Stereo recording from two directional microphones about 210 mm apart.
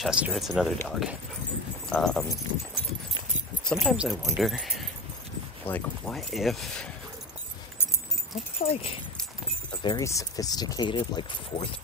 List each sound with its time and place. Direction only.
0.0 s speech: centre (ahead or behind)
3.6 s speech: centre (ahead or behind)
8.6 s speech: 25° left (ahead or behind)